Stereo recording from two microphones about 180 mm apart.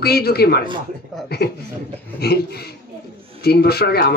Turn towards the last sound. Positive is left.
turn(degrees=60)  # may be behind; listen again after turning